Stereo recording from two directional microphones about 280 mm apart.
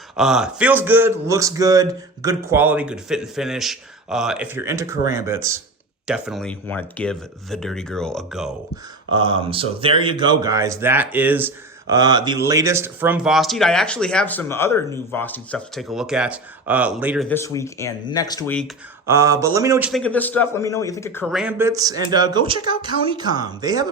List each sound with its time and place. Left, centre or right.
0.2 s a man's voice: centre
9.1 s speech: centre
17.2 s speech: centre
19.0 s a man's voice: centre
19.9 s a man's voice: centre